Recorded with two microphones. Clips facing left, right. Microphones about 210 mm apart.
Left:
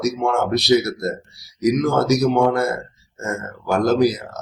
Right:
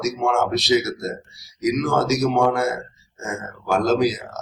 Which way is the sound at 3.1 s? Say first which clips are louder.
Left 3 dB; 60° left (ahead or behind).